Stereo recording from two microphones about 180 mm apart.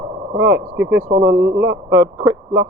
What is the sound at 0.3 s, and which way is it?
Speech, 10° right (ahead or behind).